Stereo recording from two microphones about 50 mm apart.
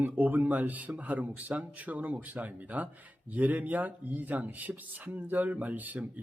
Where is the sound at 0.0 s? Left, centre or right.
Right.